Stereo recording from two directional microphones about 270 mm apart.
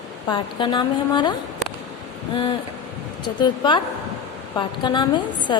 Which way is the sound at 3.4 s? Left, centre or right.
Centre.